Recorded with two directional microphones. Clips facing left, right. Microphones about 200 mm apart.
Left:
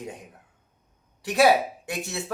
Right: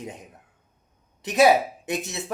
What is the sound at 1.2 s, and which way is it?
Speech, 20° right (ahead or behind).